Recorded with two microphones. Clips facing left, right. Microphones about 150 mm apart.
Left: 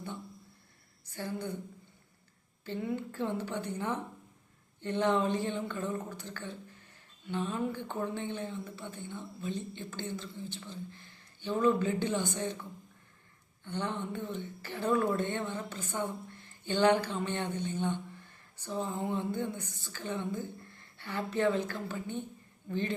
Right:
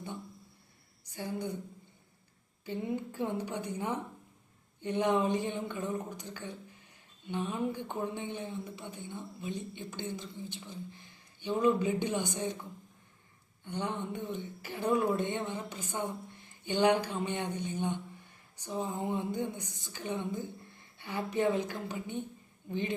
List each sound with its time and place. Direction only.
1.0 s a woman's voice: 15° right (ahead or behind)
2.6 s a woman's voice: 15° right (ahead or behind)
13.7 s a woman's voice: 15° right (ahead or behind)